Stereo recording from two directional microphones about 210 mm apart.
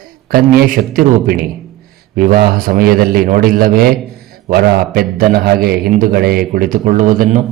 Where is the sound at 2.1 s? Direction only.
40° right (ahead or behind).